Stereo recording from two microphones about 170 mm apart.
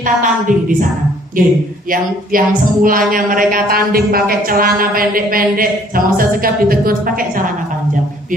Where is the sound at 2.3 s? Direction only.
55° right (ahead or behind).